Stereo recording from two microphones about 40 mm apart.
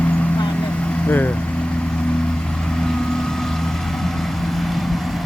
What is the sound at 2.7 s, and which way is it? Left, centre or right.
Vehicle, centre.